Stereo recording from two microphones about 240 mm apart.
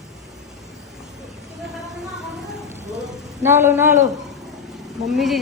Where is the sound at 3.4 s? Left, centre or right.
Centre.